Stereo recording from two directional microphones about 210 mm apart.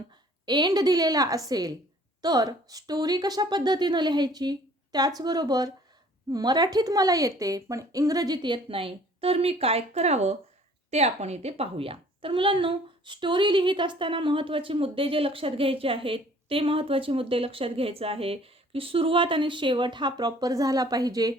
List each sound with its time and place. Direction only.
0.4 s a woman's voice: 20° right (ahead or behind)